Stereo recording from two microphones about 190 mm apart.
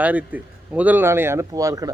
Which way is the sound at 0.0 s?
5° right (ahead or behind).